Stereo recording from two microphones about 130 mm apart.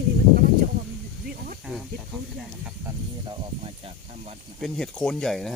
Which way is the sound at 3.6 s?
50° right (ahead or behind).